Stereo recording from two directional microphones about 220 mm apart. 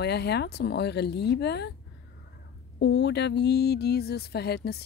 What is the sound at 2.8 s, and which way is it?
Speech, 50° left (ahead or behind).